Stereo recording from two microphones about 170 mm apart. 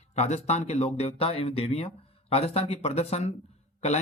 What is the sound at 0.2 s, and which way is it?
Speech, 40° left (ahead or behind).